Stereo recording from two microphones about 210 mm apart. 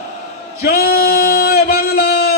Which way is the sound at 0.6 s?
45° left (ahead or behind).